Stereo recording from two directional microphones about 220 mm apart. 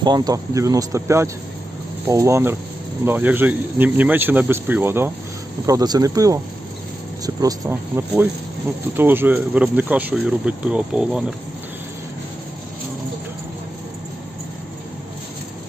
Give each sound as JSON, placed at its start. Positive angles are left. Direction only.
{"t": 0.0, "sound": "speech", "side_deg": -20}